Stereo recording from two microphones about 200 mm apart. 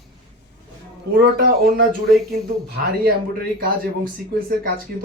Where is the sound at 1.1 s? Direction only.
50° right (ahead or behind).